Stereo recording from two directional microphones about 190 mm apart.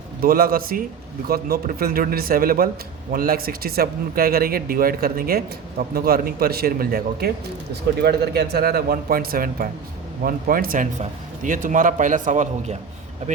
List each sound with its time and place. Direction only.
0.2 s a man's voice: 50° right (ahead or behind)